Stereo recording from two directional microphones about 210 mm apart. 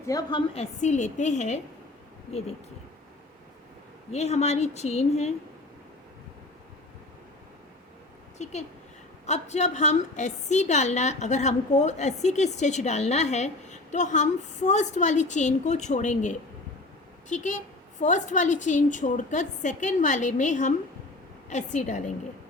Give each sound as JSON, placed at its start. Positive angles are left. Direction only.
{"t": 0.0, "sound": "a woman's voice", "side_deg": 15}
{"t": 4.1, "sound": "a woman's voice", "side_deg": 30}
{"t": 8.4, "sound": "a woman's voice", "side_deg": 30}